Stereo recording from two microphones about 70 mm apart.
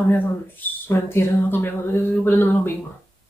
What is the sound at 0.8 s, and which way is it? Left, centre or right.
Speech, left.